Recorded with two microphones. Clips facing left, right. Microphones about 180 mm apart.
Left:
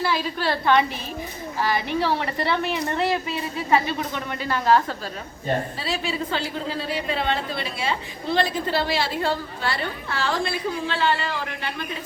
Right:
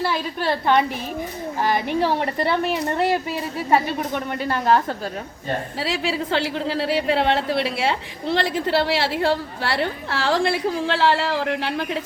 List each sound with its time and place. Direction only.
1.6 s a woman's voice: 50° right (ahead or behind)
5.8 s a woman's voice: 90° right; by 11.9 s 75° right (ahead or behind)